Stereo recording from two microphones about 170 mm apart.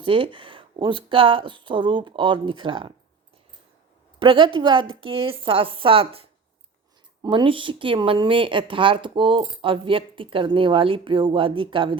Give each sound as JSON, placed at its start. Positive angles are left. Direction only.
{"t": 0.0, "sound": "speech", "side_deg": -30}
{"t": 4.2, "sound": "a woman's voice", "side_deg": -30}